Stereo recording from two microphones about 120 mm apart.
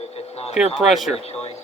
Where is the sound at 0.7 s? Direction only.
Centre (ahead or behind).